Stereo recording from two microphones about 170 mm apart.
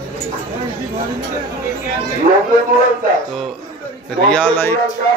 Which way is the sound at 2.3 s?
45° right (ahead or behind).